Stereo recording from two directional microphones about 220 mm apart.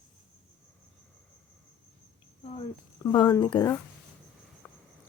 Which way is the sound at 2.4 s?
25° left (ahead or behind).